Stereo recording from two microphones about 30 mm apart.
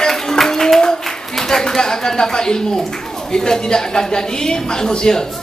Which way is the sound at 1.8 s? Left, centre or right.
Left.